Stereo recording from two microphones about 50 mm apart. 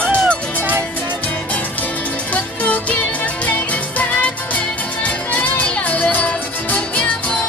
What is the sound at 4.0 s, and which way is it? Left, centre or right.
Music, left.